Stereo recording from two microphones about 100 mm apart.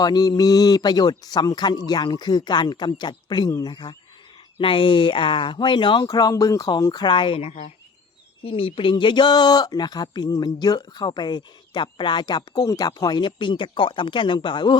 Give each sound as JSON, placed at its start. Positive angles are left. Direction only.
{"t": 0.0, "sound": "speech", "side_deg": 40}
{"t": 4.5, "sound": "speech", "side_deg": 65}